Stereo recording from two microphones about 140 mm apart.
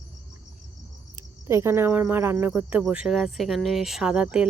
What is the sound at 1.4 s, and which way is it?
Speech, 20° right (ahead or behind).